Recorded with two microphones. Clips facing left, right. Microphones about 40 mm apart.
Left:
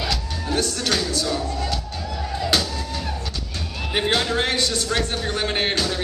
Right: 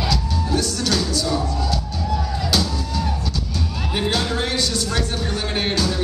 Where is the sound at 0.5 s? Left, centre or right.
Left.